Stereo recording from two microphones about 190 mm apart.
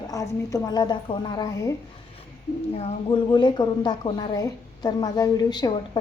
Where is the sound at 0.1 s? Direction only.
15° left (ahead or behind).